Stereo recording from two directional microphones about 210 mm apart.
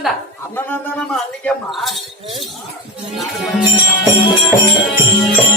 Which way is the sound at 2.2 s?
25° right (ahead or behind).